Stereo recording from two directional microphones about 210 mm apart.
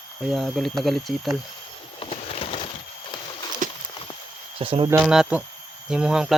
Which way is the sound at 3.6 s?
40° right (ahead or behind).